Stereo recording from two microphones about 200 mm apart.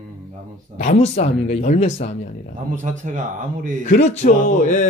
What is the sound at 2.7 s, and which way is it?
Speech, 40° right (ahead or behind).